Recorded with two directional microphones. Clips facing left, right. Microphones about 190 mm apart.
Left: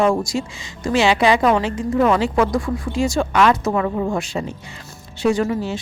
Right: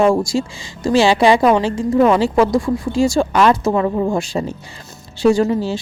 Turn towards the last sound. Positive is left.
turn(degrees=-30)  # may be behind; listen again after turning